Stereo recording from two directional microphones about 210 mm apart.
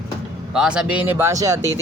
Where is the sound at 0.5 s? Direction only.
5° right (ahead or behind).